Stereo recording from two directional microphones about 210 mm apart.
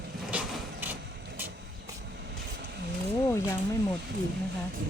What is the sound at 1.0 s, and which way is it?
Vehicle, 55° right (ahead or behind).